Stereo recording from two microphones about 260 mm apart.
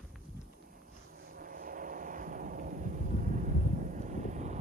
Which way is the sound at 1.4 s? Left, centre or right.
Right.